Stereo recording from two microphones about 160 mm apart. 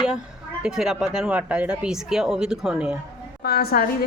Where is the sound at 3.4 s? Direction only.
75° left (ahead or behind).